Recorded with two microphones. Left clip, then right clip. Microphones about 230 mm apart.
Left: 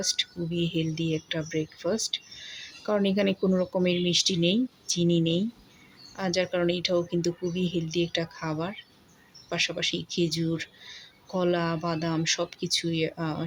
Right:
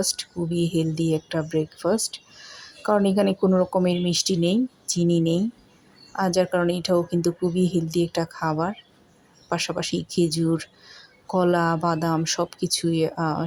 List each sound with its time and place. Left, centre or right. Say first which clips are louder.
0.0 s speech: right 2 dB; centre